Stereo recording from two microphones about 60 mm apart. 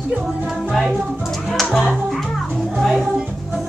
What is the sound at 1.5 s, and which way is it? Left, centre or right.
Music, centre.